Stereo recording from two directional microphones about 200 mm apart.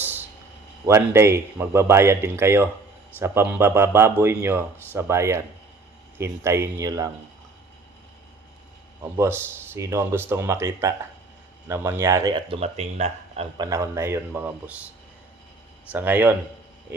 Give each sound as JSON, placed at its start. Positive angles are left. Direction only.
{"t": 0.9, "sound": "a man's voice", "side_deg": -10}
{"t": 9.1, "sound": "a man's voice", "side_deg": -15}
{"t": 12.5, "sound": "speech", "side_deg": -30}
{"t": 13.7, "sound": "a man's voice", "side_deg": -15}
{"t": 15.9, "sound": "a man's voice", "side_deg": -10}